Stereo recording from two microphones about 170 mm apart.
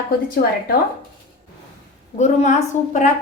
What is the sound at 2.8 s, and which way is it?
Speech, 45° left (ahead or behind).